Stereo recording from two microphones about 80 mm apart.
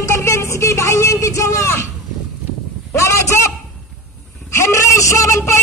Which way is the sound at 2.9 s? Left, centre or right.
Left.